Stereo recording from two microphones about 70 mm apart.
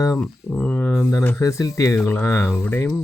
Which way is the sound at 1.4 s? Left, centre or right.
Left.